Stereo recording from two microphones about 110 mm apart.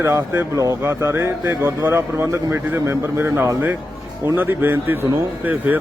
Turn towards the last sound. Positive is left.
turn(degrees=-15)  # may be behind; listen again after turning